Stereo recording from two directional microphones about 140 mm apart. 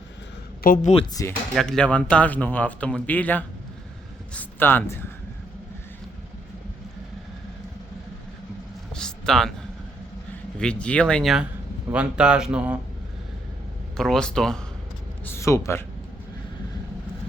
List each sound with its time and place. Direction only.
0.6 s speech: 80° left
1.2 s speech: 20° left (ahead or behind)
1.5 s a man's voice: 5° left (ahead or behind)
9.0 s a sound: 5° left (ahead or behind)
10.6 s a man's voice: 5° left (ahead or behind); by 12.8 s 10° right (ahead or behind)
13.9 s speech: 5° left (ahead or behind)
15.2 s speech: 20° left (ahead or behind)